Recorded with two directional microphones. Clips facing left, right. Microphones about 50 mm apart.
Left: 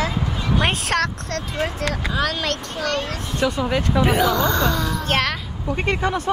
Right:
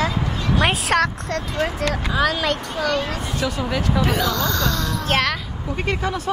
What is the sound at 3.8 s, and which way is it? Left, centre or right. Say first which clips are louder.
Speech: left 2 dB; centre.